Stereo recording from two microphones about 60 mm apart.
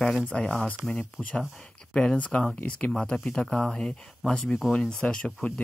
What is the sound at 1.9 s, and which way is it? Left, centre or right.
Speech, centre.